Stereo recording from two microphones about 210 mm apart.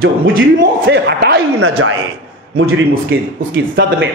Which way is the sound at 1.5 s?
90° right.